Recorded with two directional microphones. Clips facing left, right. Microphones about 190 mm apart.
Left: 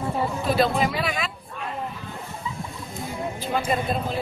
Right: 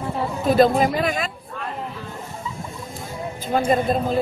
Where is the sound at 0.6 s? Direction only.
45° right (ahead or behind).